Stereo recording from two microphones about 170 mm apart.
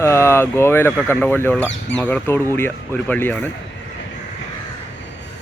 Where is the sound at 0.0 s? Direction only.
15° left (ahead or behind).